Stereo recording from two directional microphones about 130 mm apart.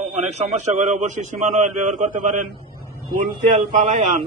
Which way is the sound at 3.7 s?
70° right (ahead or behind).